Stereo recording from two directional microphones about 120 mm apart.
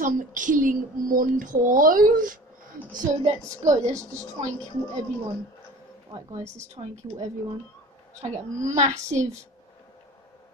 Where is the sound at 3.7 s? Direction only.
25° right (ahead or behind).